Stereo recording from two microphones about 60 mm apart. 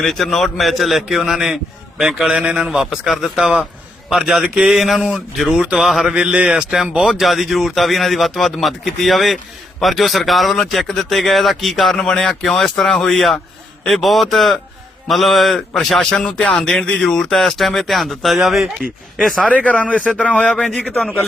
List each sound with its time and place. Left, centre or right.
0.0 s a man's voice: centre
6.1 s speech: centre
19.5 s speech: left
20.9 s speech: centre